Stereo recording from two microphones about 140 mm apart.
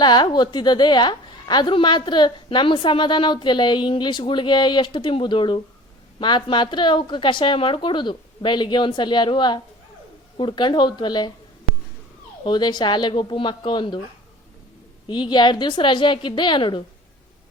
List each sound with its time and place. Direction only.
0.0 s a woman's voice: 30° left (ahead or behind)
12.5 s a woman's voice: 30° left (ahead or behind)
15.0 s a woman's voice: 35° left (ahead or behind)